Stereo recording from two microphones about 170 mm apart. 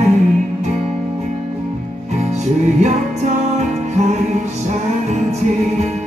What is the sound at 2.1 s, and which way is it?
Music, 40° right (ahead or behind).